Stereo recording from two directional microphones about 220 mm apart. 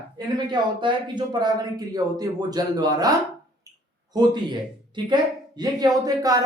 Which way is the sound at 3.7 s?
15° right (ahead or behind).